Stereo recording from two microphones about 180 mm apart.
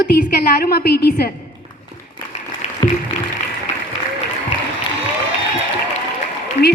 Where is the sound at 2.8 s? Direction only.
25° left (ahead or behind).